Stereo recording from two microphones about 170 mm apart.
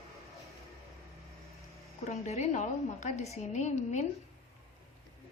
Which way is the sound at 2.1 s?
40° left (ahead or behind).